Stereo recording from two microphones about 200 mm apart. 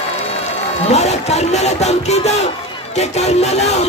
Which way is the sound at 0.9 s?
35° left (ahead or behind).